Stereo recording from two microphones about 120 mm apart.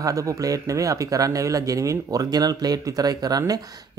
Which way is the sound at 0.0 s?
25° right (ahead or behind).